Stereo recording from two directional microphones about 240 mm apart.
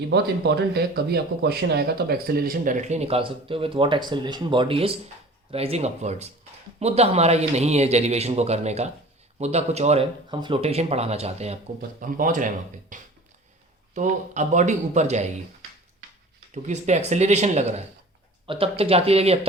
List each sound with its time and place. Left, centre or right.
0.1 s speech: right
16.6 s speech: right